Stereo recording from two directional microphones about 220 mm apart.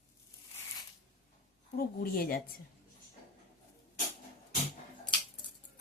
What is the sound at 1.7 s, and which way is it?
Speech, 45° left (ahead or behind).